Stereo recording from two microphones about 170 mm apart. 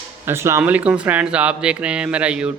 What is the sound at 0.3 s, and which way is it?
A man's voice, 15° right (ahead or behind).